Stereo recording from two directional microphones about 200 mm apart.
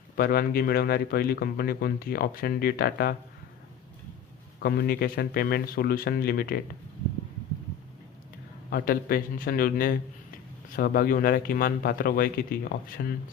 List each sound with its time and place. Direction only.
0.2 s speech: 50° left (ahead or behind)
4.6 s speech: 50° left (ahead or behind)
8.7 s speech: 50° left (ahead or behind)